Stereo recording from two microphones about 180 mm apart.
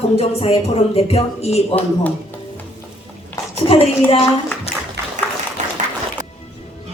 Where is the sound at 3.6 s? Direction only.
30° left (ahead or behind).